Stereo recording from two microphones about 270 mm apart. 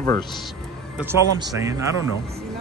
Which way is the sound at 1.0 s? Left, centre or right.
Centre.